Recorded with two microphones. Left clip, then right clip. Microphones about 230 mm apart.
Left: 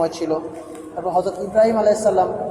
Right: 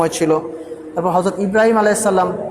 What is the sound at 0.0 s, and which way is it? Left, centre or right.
A man's voice, right.